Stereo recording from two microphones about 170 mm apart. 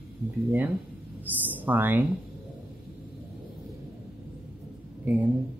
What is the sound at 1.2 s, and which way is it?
Speech, 10° right (ahead or behind).